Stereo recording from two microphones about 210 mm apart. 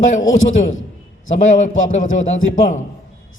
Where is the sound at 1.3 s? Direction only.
35° left (ahead or behind).